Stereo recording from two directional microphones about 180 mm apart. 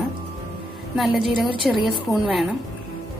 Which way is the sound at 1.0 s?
Centre (ahead or behind).